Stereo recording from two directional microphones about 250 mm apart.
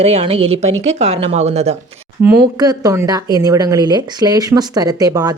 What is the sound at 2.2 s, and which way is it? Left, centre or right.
Speech, centre.